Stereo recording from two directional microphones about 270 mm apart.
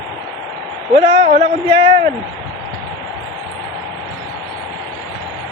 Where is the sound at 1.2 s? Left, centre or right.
Right.